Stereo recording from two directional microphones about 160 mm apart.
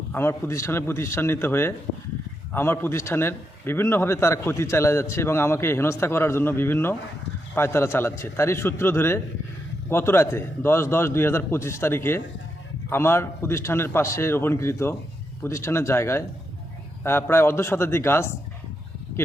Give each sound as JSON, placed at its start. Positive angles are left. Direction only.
{"t": 0.1, "sound": "a man's voice", "side_deg": 15}